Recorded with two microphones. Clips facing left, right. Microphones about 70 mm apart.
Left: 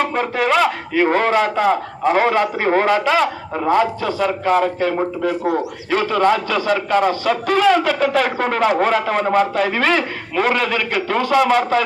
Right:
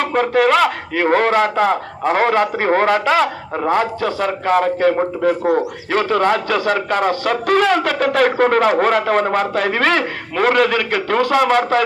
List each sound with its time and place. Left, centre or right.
0.0 s a man's voice: right